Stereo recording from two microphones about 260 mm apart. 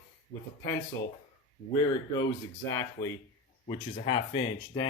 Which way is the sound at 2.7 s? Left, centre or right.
Centre.